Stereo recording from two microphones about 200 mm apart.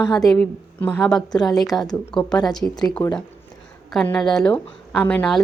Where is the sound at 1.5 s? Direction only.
20° left (ahead or behind).